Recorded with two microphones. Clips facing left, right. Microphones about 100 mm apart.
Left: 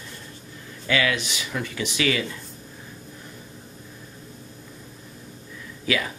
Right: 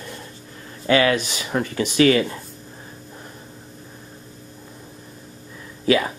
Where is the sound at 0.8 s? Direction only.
40° right (ahead or behind).